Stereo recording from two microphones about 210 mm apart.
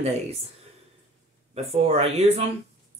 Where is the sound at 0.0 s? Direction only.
30° right (ahead or behind).